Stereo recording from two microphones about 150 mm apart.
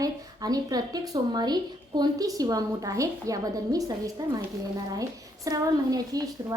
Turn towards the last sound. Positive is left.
turn(degrees=-25)  # may be behind; listen again after turning